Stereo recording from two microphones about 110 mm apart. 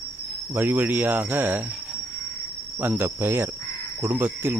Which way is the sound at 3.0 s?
20° right (ahead or behind).